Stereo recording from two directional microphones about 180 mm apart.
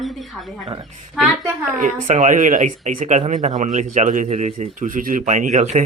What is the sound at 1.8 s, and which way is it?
Speech, 40° right (ahead or behind).